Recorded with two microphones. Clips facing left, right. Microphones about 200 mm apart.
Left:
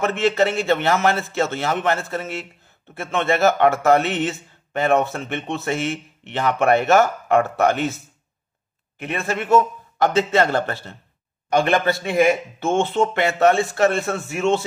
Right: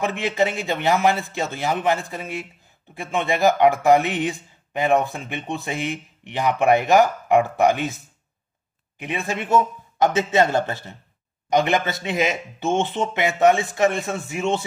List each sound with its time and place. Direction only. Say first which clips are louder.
0.0 s speech: left 3 dB; 15° right (ahead or behind)